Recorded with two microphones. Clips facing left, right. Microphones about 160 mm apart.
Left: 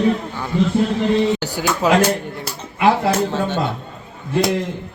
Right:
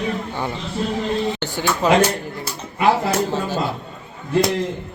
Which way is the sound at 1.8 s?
5° left (ahead or behind).